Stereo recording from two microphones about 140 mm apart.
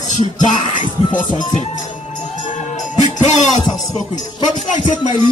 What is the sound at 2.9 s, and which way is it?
Music, 55° left (ahead or behind).